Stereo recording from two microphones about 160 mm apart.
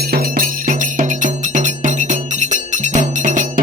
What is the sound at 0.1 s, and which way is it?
Music, 65° right (ahead or behind).